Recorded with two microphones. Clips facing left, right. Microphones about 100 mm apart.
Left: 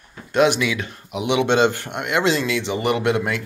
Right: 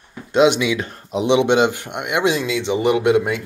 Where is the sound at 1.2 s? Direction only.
25° right (ahead or behind).